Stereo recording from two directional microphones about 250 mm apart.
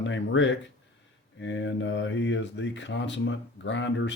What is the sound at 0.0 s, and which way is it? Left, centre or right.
Speech, left.